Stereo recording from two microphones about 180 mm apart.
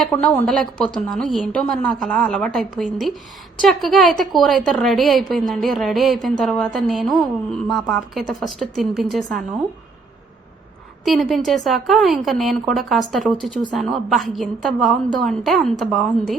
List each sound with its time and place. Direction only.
0.0 s a woman's voice: 5° left (ahead or behind)
11.0 s a woman's voice: centre (ahead or behind)